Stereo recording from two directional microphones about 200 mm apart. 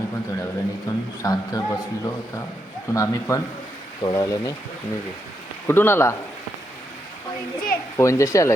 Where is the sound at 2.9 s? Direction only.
15° left (ahead or behind).